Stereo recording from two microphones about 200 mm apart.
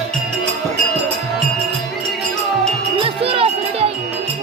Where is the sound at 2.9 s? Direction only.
30° right (ahead or behind).